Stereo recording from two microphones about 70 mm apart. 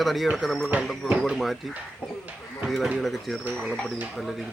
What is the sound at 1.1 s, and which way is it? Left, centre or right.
Speech, centre.